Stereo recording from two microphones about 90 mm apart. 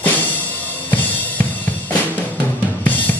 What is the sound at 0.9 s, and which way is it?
Drum kit, 20° left (ahead or behind).